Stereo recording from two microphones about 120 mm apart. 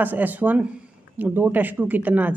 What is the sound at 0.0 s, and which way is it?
A woman's voice, 15° right (ahead or behind).